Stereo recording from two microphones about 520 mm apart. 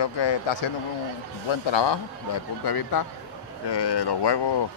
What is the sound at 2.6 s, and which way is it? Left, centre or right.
Speech, left.